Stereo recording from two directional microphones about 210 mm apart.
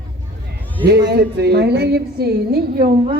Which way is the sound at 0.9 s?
50° right (ahead or behind).